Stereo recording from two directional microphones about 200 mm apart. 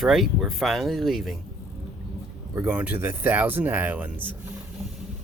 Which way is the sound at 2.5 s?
10° right (ahead or behind).